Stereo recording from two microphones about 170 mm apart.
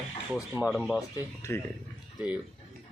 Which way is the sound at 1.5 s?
15° left (ahead or behind).